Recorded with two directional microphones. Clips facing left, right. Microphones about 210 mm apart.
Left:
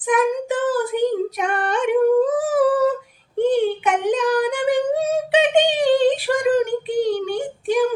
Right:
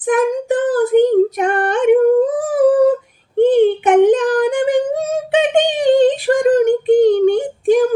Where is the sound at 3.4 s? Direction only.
50° right (ahead or behind).